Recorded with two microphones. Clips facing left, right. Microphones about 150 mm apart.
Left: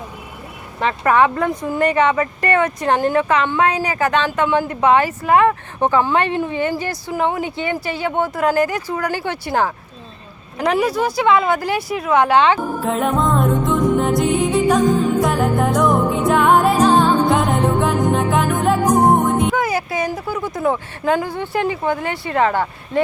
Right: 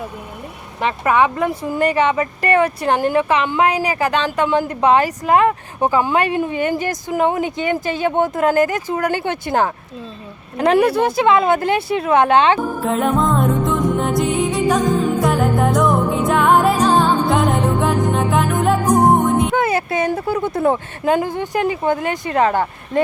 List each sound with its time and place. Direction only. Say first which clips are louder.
1.0 s speech: left 1 dB; 15° right (ahead or behind)
2.6 s speech: even; 10° right (ahead or behind)
5.8 s speech: even; 10° right (ahead or behind)
10.8 s speech: right 4 dB; 60° right (ahead or behind)
11.2 s speech: right 1 dB; 20° right (ahead or behind)
12.8 s music: right 1 dB; centre (ahead or behind)
19.5 s music: right 2 dB; 25° right (ahead or behind)
20.1 s speech: right 4 dB; 30° right (ahead or behind)
21.0 s speech: right 1 dB; 20° right (ahead or behind)